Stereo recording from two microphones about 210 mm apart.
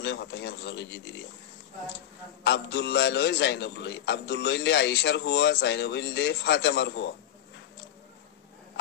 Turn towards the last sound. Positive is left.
turn(degrees=55)  # may be behind; listen again after turning